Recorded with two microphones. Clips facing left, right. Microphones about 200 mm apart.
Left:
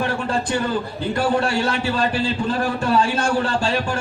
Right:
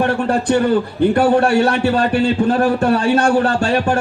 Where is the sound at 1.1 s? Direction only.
60° right (ahead or behind).